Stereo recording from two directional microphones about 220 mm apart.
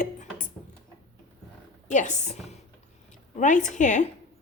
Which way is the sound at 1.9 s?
35° left (ahead or behind).